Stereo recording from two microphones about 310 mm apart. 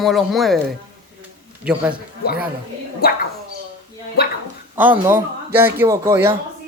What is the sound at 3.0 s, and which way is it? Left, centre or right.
Speech, left.